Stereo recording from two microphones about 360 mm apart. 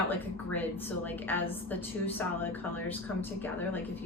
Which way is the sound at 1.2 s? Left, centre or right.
Centre.